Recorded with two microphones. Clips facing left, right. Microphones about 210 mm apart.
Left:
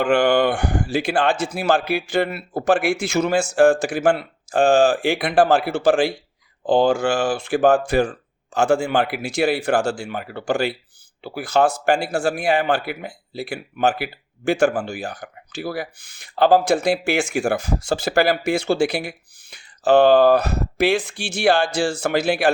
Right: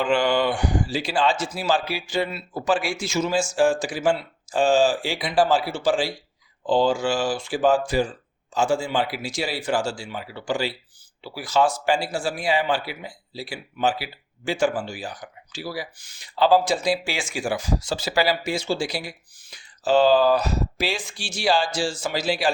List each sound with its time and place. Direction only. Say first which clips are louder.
0.0 s speech: left 4 dB; 55° left (ahead or behind)